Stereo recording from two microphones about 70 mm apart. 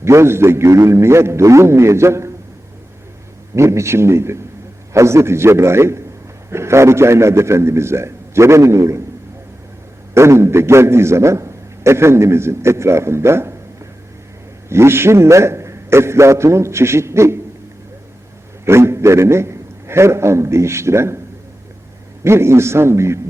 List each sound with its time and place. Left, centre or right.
0.0 s a man's voice: right
3.5 s a man's voice: right
10.2 s a man's voice: right
14.7 s a man's voice: right
18.6 s a man's voice: right
22.2 s a man's voice: right